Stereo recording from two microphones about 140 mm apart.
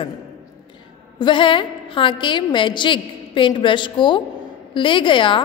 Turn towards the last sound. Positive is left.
turn(degrees=35)  # may be behind; listen again after turning